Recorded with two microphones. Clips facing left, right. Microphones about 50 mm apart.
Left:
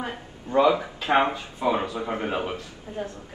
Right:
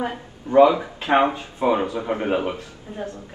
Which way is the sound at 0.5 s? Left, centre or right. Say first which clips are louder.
Right 5 dB; right.